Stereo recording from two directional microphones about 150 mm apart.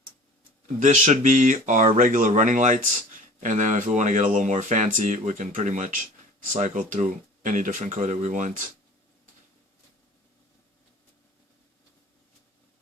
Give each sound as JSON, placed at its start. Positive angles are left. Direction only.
{"t": 0.8, "sound": "speech", "side_deg": -55}